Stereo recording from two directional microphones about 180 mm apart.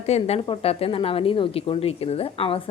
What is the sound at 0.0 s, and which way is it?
A woman's voice, 35° left (ahead or behind).